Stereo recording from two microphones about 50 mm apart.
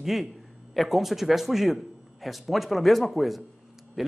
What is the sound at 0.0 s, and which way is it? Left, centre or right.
A man's voice, centre.